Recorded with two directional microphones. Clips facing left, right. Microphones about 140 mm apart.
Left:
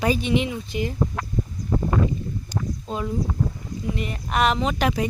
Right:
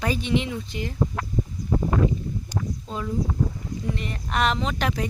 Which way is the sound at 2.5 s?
20° left (ahead or behind).